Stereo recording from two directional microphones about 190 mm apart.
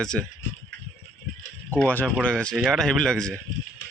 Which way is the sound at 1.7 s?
10° left (ahead or behind).